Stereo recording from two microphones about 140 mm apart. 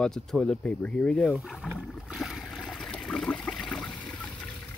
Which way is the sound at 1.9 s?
Centre (ahead or behind).